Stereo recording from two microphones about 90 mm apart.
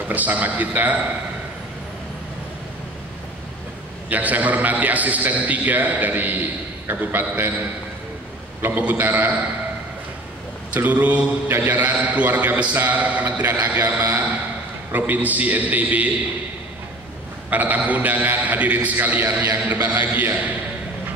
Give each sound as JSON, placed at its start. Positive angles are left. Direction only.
{"t": 0.1, "sound": "a man's voice", "side_deg": -20}
{"t": 4.1, "sound": "a man's voice", "side_deg": -15}
{"t": 8.6, "sound": "a man's voice", "side_deg": -20}
{"t": 10.7, "sound": "a man's voice", "side_deg": -20}
{"t": 17.5, "sound": "a man's voice", "side_deg": -20}